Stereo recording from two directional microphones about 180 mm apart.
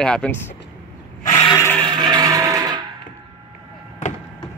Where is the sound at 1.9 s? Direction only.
25° right (ahead or behind).